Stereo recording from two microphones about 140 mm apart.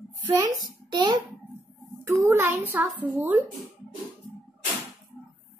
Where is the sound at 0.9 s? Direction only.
30° right (ahead or behind).